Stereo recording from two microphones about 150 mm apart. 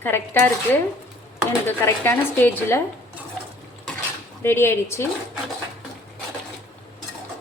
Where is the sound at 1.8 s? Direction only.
15° left (ahead or behind).